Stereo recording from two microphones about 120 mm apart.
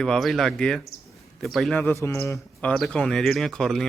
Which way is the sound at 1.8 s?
20° left (ahead or behind).